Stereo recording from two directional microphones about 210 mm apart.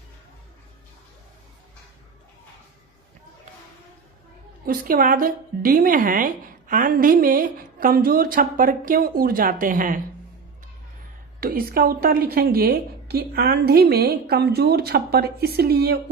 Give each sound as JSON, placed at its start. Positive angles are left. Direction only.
{"t": 4.6, "sound": "a woman's voice", "side_deg": -45}
{"t": 11.3, "sound": "a woman's voice", "side_deg": -45}